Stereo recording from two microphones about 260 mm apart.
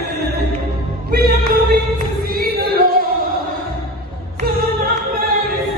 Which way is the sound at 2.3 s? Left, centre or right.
Right.